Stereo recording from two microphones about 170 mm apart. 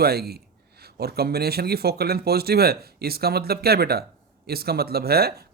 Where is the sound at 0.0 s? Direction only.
65° right (ahead or behind).